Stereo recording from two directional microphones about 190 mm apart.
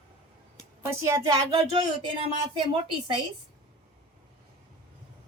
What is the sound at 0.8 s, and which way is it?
A woman's voice, 15° right (ahead or behind).